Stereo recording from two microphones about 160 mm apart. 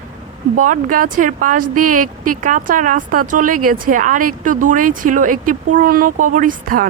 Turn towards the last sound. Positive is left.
turn(degrees=-60)  # may be behind; listen again after turning